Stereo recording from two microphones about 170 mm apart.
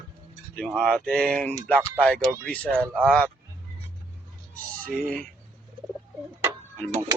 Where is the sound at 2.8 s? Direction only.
10° right (ahead or behind).